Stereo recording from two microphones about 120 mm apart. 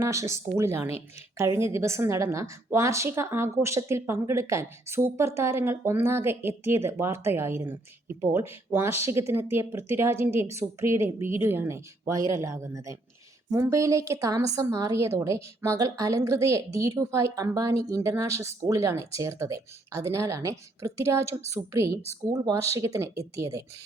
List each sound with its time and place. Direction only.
0.0 s a woman's voice: 25° right (ahead or behind)